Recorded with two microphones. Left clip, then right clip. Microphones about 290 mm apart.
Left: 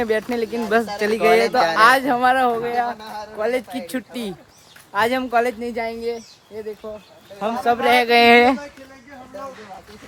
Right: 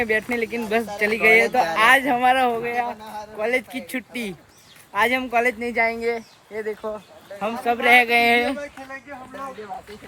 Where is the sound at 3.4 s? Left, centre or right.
Centre.